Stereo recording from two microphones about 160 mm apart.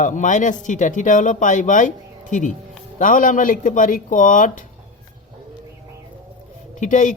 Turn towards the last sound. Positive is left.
turn(degrees=50)  # may be behind; listen again after turning